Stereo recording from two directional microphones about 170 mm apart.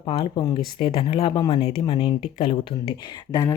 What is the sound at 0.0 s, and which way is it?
Speech, 30° left (ahead or behind).